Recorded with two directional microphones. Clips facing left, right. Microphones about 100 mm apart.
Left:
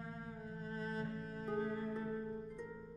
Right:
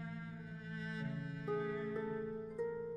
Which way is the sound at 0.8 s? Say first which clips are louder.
Left 1 dB; 45° left (ahead or behind).